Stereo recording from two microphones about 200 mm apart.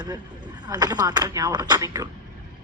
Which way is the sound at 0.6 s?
20° right (ahead or behind).